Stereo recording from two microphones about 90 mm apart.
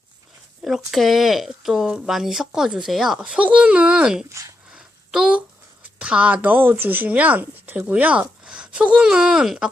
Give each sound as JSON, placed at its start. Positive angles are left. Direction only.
{"t": 0.6, "sound": "speech", "side_deg": 0}
{"t": 4.3, "sound": "speech", "side_deg": -35}
{"t": 4.7, "sound": "a sound", "side_deg": -10}
{"t": 6.0, "sound": "a woman's voice", "side_deg": -15}